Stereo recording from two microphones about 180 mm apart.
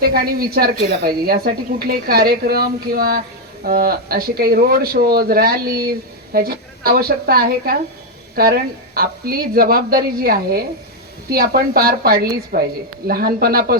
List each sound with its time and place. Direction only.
0.0 s a woman's voice: 55° right (ahead or behind)